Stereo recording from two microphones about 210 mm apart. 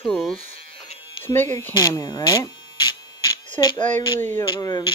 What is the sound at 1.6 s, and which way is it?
Electric shaver, 15° left (ahead or behind).